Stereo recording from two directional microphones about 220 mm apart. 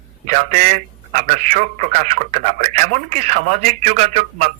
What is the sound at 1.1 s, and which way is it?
A man's voice, 35° right (ahead or behind).